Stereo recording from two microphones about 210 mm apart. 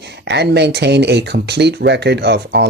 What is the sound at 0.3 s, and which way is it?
Speech, 55° right (ahead or behind).